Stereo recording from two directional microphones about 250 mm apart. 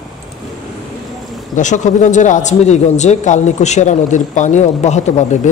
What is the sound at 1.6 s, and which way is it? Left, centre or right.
Speech, left.